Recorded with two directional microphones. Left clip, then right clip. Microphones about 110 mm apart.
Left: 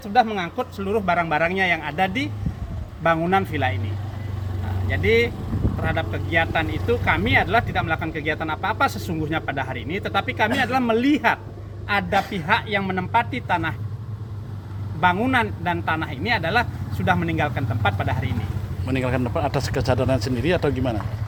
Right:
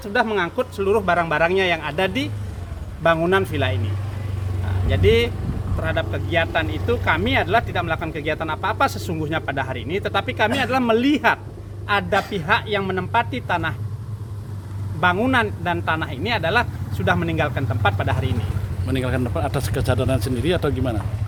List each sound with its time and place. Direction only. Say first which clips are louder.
0.0 s speech: even; 45° right (ahead or behind)
4.9 s speech: right 1 dB; 40° right (ahead or behind)
15.0 s speech: right 1 dB; 45° right (ahead or behind)
18.9 s speech: even; 5° right (ahead or behind)